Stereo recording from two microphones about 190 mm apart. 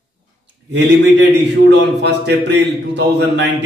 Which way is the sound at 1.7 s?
65° right (ahead or behind).